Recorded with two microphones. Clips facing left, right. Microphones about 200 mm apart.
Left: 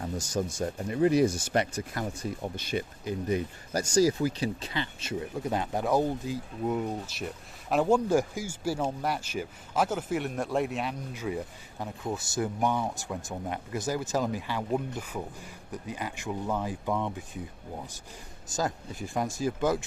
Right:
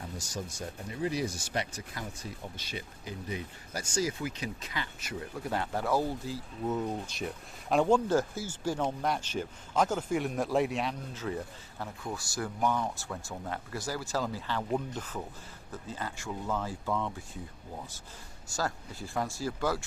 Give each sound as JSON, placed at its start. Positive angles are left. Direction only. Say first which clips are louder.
{"t": 0.3, "sound": "speech", "louder": "left 9 dB", "side_deg": 55}
{"t": 7.1, "sound": "speech", "louder": "even", "side_deg": 0}
{"t": 11.1, "sound": "speech", "louder": "left 2 dB", "side_deg": 10}
{"t": 18.4, "sound": "speech", "louder": "left 3 dB", "side_deg": 20}